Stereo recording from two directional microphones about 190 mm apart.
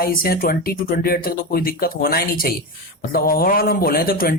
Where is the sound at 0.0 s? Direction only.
50° left (ahead or behind).